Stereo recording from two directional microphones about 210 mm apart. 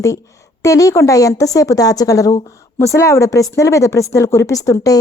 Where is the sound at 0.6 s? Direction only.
15° left (ahead or behind).